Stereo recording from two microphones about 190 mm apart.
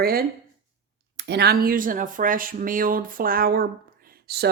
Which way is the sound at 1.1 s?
60° right (ahead or behind).